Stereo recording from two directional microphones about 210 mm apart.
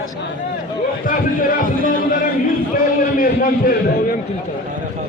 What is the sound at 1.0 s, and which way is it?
Speech, 40° left (ahead or behind).